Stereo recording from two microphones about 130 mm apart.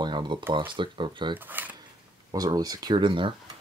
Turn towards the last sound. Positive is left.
turn(degrees=-40)  # may be behind; listen again after turning